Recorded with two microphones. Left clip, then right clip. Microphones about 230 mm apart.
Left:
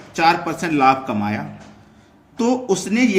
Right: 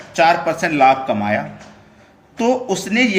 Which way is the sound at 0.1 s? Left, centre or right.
Centre.